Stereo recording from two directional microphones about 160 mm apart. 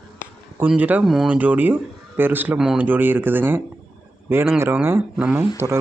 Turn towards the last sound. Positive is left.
turn(degrees=-10)  # may be behind; listen again after turning